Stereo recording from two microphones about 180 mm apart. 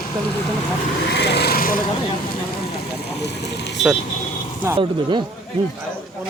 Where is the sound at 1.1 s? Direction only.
65° left (ahead or behind).